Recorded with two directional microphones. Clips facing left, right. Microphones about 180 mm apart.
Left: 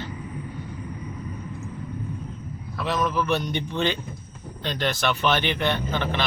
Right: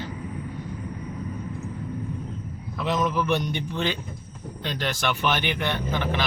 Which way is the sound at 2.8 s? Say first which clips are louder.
Even; 20° right (ahead or behind).